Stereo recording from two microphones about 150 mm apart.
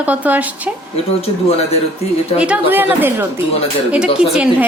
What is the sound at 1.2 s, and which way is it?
Speech, 40° left (ahead or behind).